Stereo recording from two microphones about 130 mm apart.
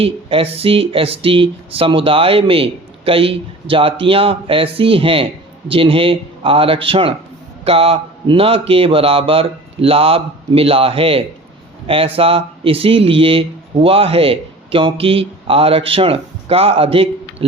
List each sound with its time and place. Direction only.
0.0 s speech: 45° right (ahead or behind)